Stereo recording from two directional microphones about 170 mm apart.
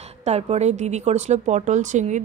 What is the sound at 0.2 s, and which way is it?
A woman's voice, 40° right (ahead or behind).